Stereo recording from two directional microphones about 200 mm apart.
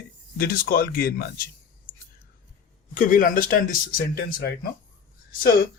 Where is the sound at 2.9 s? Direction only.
45° left (ahead or behind).